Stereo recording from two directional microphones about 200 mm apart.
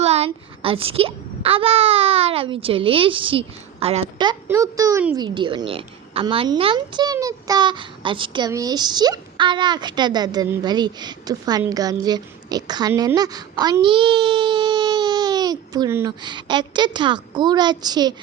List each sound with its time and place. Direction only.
0.0 s a woman's voice: 30° right (ahead or behind)
4.4 s a woman's voice: 15° right (ahead or behind)